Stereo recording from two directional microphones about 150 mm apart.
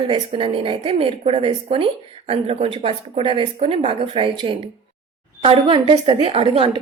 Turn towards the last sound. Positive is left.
turn(degrees=-40)  # may be behind; listen again after turning